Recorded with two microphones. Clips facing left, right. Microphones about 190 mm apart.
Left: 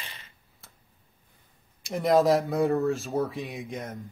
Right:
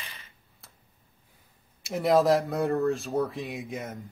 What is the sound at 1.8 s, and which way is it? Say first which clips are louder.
Speech: even; centre (ahead or behind).